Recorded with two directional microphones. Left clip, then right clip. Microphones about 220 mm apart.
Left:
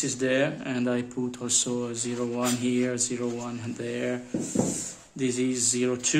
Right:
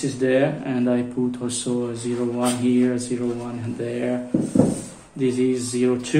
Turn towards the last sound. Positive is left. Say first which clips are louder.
# right 4 dB
turn(degrees=40)  # may be behind; listen again after turning